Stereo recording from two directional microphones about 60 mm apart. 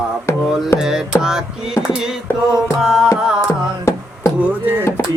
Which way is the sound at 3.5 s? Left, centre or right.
Left.